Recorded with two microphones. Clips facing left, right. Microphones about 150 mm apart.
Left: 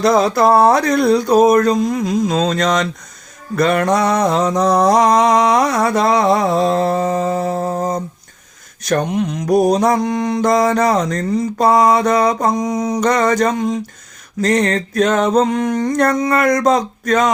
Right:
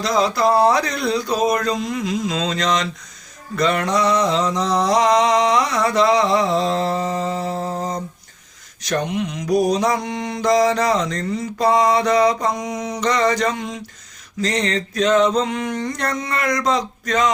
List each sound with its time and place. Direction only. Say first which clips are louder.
0.0 s mantra: left 5 dB; 50° left (ahead or behind)